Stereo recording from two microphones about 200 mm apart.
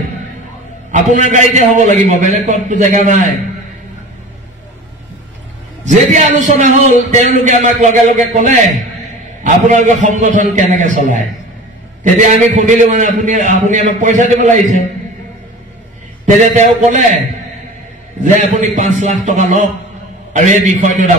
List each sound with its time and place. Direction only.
1.3 s a man's voice: 40° right (ahead or behind)
5.9 s a man's voice: 35° right (ahead or behind)
16.3 s a man's voice: 40° right (ahead or behind)
18.5 s a man's voice: 40° right (ahead or behind)